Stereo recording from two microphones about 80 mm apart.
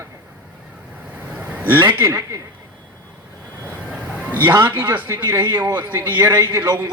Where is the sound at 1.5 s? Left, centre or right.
Right.